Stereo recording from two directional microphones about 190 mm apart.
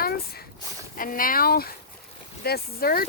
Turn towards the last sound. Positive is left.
turn(degrees=50)  # may be behind; listen again after turning